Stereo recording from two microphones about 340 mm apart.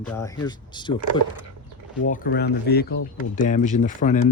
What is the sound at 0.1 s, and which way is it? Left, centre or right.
Speech, centre.